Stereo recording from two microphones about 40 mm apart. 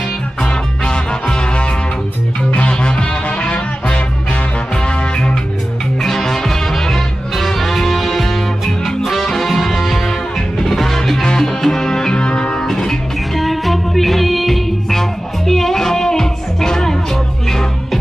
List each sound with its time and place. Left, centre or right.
0.4 s music: centre
2.5 s music: left
5.9 s music: centre
12.6 s music: centre